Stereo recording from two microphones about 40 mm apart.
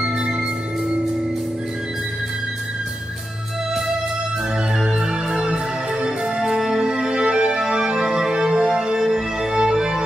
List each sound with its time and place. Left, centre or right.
4.7 s music: centre